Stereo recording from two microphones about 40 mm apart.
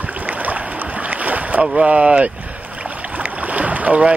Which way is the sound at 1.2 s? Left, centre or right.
Right.